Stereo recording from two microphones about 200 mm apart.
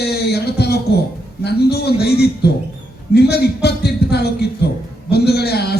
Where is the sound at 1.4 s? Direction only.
55° left (ahead or behind).